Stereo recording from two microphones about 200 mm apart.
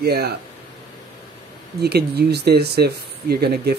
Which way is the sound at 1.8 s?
55° right (ahead or behind).